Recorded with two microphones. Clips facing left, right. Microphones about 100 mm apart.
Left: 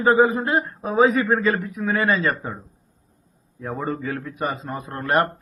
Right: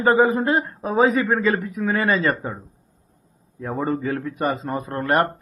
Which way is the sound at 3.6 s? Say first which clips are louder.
Right 3 dB; 45° right (ahead or behind).